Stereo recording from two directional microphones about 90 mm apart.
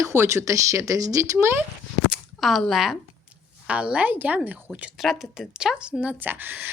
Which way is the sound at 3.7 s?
15° right (ahead or behind).